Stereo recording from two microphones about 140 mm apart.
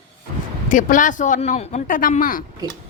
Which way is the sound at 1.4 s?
50° left (ahead or behind).